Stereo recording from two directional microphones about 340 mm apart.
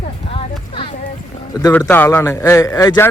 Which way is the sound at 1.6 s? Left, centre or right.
Centre.